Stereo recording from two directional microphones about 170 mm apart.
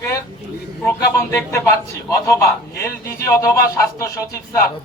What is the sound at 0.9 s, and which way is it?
A man's voice, 15° left (ahead or behind).